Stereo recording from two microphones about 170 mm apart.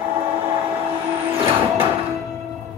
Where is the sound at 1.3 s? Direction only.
30° right (ahead or behind).